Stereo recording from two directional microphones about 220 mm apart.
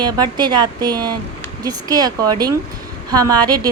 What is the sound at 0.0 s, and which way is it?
A woman's voice, 20° right (ahead or behind).